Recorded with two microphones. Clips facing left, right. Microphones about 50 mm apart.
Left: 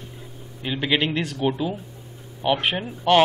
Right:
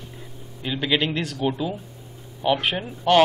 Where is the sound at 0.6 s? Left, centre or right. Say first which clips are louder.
Even; centre.